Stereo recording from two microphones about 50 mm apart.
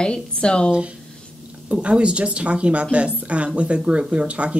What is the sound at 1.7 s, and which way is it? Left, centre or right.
Speech, right.